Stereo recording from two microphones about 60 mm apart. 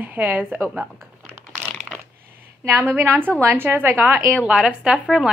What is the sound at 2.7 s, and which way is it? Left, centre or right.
A woman's voice, right.